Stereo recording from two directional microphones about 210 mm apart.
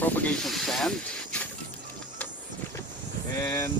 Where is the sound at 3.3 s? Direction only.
15° left (ahead or behind).